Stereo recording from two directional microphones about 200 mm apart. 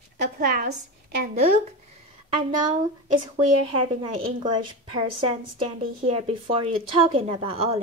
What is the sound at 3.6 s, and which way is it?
A woman's voice, 30° right (ahead or behind).